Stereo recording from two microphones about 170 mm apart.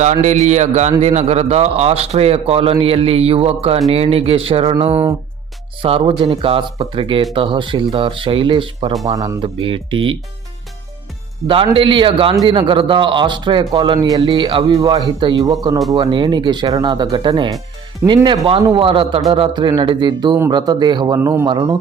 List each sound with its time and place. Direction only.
0.0 s a man's voice: 45° right (ahead or behind)
5.8 s a man's voice: 30° right (ahead or behind)
9.6 s a man's voice: 30° right (ahead or behind)
11.4 s a man's voice: 30° right (ahead or behind)